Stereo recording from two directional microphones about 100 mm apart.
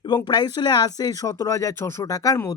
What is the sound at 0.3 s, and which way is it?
Speech, 45° left (ahead or behind).